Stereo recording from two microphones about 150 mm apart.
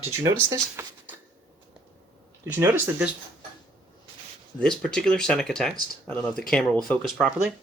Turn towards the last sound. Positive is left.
turn(degrees=5)  # may be behind; listen again after turning